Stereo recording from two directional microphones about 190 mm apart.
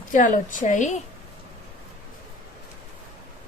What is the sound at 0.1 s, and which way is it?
Speech, 40° left (ahead or behind).